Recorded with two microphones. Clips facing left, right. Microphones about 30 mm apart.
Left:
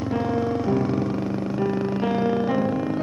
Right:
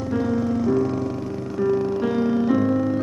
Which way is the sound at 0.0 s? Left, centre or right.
Left.